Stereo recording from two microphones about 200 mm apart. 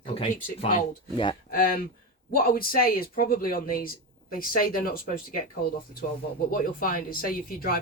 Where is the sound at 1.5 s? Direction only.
45° left (ahead or behind).